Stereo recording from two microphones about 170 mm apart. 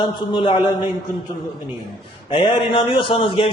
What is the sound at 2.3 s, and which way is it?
A man's voice, 30° left (ahead or behind).